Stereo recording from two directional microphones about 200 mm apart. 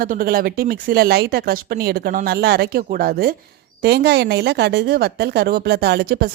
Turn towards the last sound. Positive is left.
turn(degrees=-55)  # may be behind; listen again after turning